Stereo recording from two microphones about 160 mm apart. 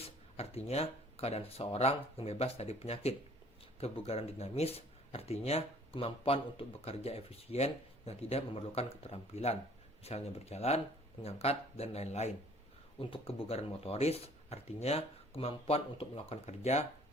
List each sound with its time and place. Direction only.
0.0 s speech: 40° left (ahead or behind)